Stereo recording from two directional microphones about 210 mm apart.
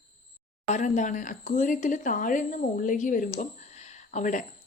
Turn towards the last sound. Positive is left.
turn(degrees=35)  # may be behind; listen again after turning